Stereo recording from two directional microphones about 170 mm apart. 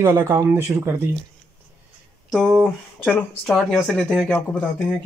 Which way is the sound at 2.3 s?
10° right (ahead or behind).